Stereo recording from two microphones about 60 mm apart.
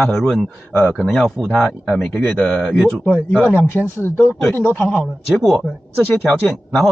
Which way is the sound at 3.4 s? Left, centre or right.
Left.